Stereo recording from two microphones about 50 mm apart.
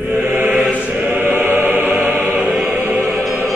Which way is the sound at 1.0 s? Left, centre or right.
Right.